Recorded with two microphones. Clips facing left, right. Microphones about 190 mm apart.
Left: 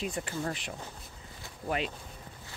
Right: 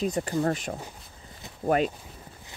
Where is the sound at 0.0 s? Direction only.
40° right (ahead or behind).